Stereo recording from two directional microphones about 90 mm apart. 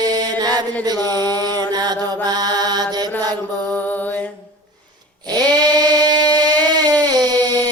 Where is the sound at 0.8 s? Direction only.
45° right (ahead or behind).